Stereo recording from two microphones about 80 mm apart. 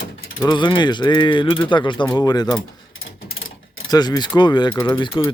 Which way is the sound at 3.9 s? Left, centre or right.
Left.